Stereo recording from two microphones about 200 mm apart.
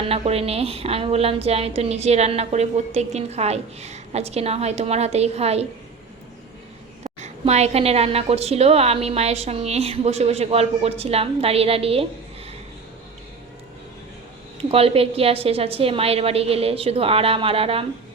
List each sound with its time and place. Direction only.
0.1 s a woman's voice: 30° right (ahead or behind)
7.0 s a woman's voice: 35° right (ahead or behind)
14.6 s a woman's voice: 30° right (ahead or behind)